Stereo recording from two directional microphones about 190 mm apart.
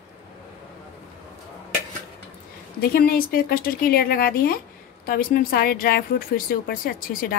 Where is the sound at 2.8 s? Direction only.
55° left (ahead or behind).